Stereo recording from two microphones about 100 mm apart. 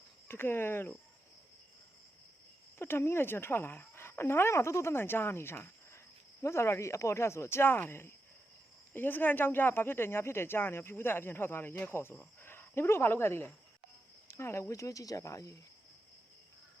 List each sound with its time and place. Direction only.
0.3 s speech: 25° left (ahead or behind)
2.7 s speech: 25° left (ahead or behind)